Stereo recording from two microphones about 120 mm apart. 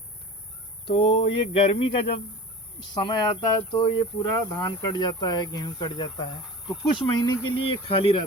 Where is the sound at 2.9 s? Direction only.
40° left (ahead or behind).